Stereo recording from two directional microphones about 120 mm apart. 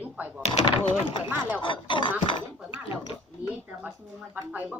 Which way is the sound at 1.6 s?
40° left (ahead or behind).